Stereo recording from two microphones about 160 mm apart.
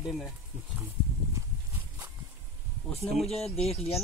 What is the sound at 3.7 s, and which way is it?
Speech, 40° left (ahead or behind).